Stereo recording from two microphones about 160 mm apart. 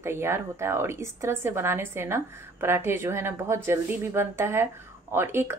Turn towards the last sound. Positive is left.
turn(degrees=-15)  # may be behind; listen again after turning